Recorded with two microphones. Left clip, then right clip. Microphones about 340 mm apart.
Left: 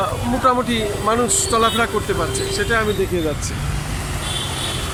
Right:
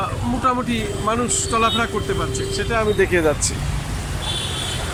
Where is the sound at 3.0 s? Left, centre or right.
Right.